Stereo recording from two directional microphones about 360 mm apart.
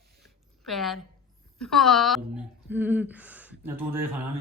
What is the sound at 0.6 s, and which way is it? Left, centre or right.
A woman's voice, centre.